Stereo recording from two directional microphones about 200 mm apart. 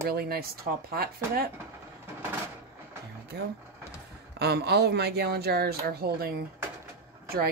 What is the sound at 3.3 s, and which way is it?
Speech, 55° right (ahead or behind).